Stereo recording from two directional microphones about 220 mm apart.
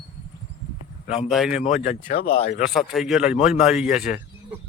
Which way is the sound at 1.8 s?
35° left (ahead or behind).